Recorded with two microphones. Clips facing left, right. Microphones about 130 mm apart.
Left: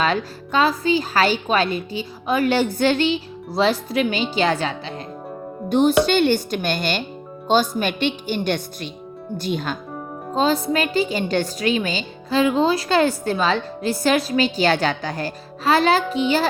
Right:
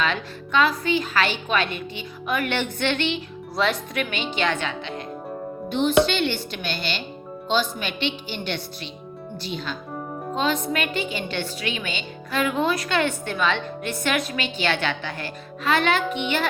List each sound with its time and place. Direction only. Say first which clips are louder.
0.0 s a woman's voice: left 4 dB; 40° left (ahead or behind)
6.1 s a woman's voice: left 7 dB; 45° left (ahead or behind)
10.3 s a woman's voice: left 5 dB; 35° left (ahead or behind)